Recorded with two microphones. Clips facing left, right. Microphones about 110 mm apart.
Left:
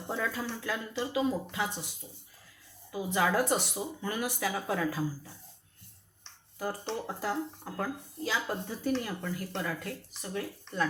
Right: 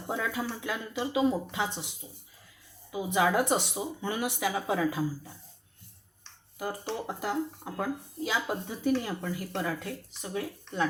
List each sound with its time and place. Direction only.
0.1 s speech: 15° right (ahead or behind)
2.9 s speech: 15° right (ahead or behind)
4.4 s speech: 15° right (ahead or behind)
6.6 s speech: 10° right (ahead or behind)